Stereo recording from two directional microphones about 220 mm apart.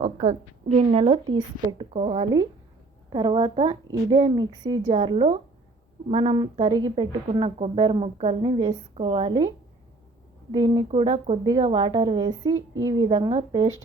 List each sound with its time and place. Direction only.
0.0 s a woman's voice: 25° right (ahead or behind)
10.5 s a woman's voice: 20° right (ahead or behind)